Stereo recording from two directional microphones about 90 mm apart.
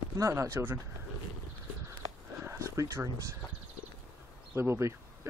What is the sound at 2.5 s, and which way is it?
Speech, 30° right (ahead or behind).